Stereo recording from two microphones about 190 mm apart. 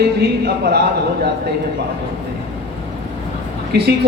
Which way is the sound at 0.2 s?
60° right (ahead or behind).